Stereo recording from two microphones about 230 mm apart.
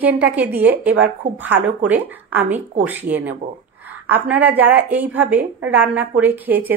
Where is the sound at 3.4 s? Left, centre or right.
Right.